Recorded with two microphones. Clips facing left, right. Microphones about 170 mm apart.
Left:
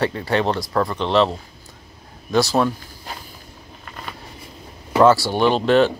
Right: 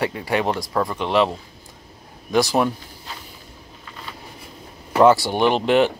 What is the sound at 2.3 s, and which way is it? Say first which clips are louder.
Speech: left 1 dB; 15° right (ahead or behind).